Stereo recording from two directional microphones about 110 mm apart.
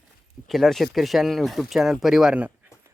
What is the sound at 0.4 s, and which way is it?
Speech, centre (ahead or behind).